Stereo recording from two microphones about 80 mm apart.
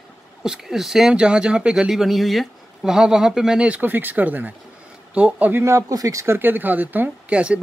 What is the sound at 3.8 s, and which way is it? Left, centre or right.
Speech, right.